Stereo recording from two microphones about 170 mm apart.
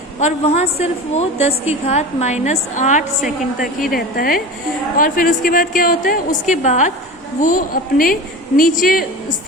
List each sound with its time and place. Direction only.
0.2 s a woman's voice: 40° left (ahead or behind)
3.8 s a woman's voice: 60° left (ahead or behind)